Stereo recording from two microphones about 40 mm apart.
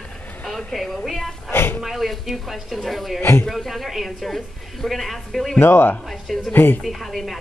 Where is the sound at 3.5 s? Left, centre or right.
Centre.